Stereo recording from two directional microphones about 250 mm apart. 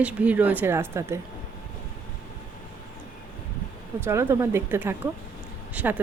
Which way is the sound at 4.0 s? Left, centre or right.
Centre.